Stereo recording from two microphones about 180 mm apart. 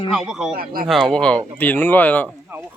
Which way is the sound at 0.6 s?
55° right (ahead or behind).